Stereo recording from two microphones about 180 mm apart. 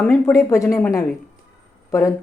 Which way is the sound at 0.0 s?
10° left (ahead or behind).